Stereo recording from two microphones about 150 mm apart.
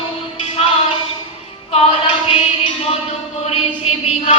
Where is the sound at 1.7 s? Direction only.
40° left (ahead or behind).